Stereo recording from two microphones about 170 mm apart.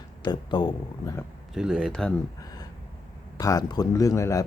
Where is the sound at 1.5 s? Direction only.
5° right (ahead or behind).